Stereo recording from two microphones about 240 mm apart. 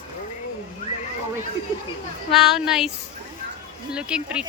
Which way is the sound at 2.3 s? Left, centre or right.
Centre.